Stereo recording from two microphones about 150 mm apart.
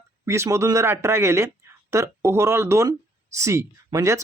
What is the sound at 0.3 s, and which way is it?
Speech, 20° right (ahead or behind).